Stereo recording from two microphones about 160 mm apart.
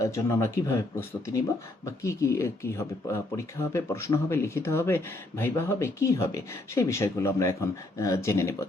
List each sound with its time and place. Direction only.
0.0 s speech: 15° left (ahead or behind)